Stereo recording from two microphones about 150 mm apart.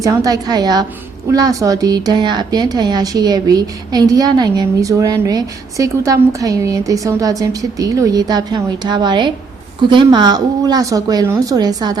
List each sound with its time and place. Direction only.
0.0 s speech: 20° right (ahead or behind)